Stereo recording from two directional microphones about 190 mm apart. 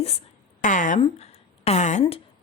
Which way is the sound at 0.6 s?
40° left (ahead or behind).